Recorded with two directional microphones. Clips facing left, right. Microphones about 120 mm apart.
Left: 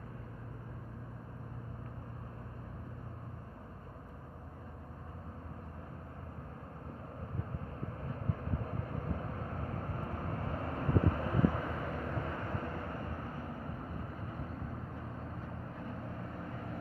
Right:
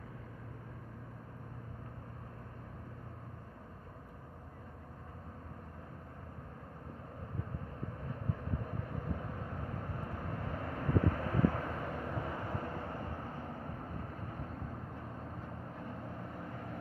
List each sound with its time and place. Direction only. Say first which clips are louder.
8.5 s vehicle: left 1 dB; 50° left (ahead or behind); by 11.3 s 25° left (ahead or behind)
11.3 s vehicle: left 1 dB; 5° left (ahead or behind)
12.3 s vehicle: even; 15° right (ahead or behind)